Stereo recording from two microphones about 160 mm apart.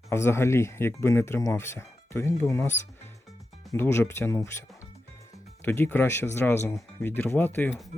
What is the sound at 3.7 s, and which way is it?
Speech, 15° left (ahead or behind).